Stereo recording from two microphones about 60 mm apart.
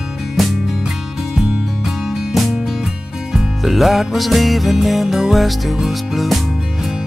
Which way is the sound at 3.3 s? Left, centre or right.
Centre.